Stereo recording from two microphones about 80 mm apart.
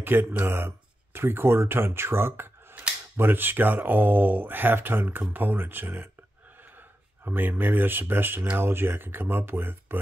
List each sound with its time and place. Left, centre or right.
0.0 s speech: right
7.2 s speech: right